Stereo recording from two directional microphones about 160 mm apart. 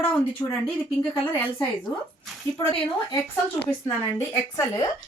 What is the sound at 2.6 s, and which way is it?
Speech, 30° left (ahead or behind).